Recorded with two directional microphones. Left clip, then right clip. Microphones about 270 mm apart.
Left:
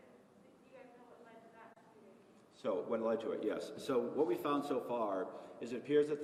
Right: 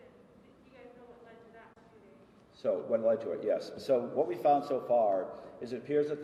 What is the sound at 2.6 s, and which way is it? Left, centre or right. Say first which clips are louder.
A man's voice: right 7 dB; left.